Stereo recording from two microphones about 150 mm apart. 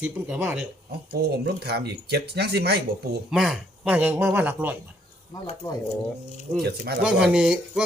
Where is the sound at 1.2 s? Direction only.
90° right.